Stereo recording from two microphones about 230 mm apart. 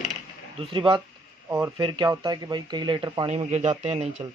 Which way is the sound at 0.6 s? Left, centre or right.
Right.